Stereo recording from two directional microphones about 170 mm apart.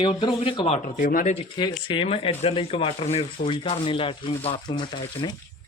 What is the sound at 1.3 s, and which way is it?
Speech, 30° left (ahead or behind).